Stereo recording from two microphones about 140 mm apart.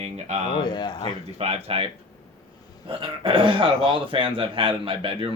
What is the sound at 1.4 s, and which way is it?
Speech, 45° right (ahead or behind).